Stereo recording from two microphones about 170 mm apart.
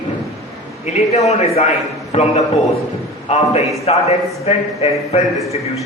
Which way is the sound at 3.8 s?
40° left (ahead or behind).